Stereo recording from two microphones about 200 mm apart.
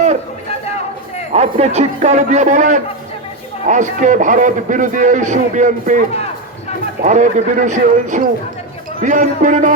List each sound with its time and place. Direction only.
1.3 s a man's voice: 35° right (ahead or behind)